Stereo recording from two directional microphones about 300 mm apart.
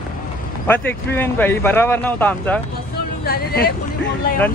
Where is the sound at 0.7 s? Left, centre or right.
Centre.